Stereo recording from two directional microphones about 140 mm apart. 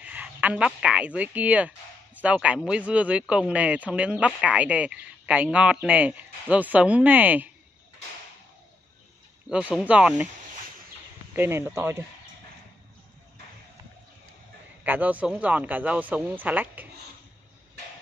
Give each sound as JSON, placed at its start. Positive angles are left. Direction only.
{"t": 0.0, "sound": "speech", "side_deg": -10}
{"t": 9.5, "sound": "speech", "side_deg": -10}
{"t": 11.3, "sound": "speech", "side_deg": -15}
{"t": 14.8, "sound": "speech", "side_deg": -10}